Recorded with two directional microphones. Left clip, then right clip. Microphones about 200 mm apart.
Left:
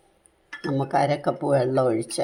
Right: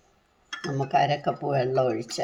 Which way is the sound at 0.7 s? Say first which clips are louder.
Left 1 dB; 20° left (ahead or behind).